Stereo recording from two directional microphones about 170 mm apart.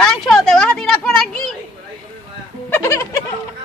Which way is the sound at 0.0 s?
Centre (ahead or behind).